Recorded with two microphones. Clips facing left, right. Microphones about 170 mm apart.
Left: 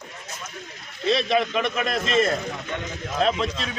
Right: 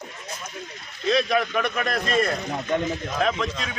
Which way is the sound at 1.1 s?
25° left (ahead or behind).